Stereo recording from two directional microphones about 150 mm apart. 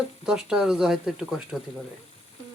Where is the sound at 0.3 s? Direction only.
5° right (ahead or behind).